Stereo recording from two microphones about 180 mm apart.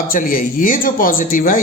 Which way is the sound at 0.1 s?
50° left (ahead or behind).